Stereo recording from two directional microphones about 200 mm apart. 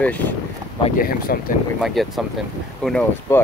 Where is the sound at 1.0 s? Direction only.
45° left (ahead or behind).